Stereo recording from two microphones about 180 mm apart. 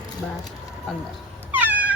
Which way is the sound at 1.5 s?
10° right (ahead or behind).